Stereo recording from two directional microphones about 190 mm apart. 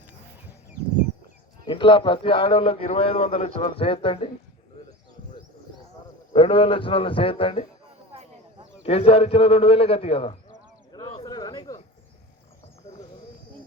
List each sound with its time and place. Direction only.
1.6 s a man's voice: 25° left (ahead or behind)
6.3 s a man's voice: 25° left (ahead or behind)
8.8 s a man's voice: 30° left (ahead or behind)
10.9 s a sound: 20° left (ahead or behind)